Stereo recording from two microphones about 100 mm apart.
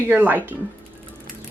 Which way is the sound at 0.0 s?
20° right (ahead or behind).